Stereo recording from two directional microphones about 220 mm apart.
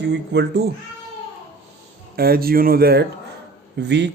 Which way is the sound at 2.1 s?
45° right (ahead or behind).